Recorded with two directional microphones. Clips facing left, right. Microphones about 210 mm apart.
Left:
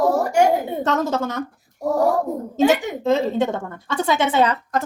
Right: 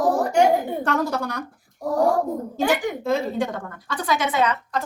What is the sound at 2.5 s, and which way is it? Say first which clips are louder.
A woman's voice: left 6 dB; 20° left (ahead or behind).